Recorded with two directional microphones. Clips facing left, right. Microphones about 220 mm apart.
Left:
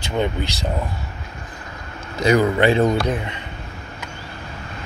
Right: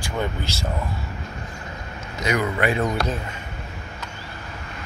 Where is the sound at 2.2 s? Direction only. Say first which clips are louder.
Left 7 dB; 30° left (ahead or behind).